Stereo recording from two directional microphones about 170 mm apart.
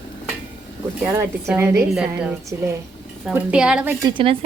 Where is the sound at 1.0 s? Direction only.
15° right (ahead or behind).